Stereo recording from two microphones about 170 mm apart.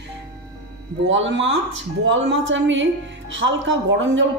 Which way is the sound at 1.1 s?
90° right.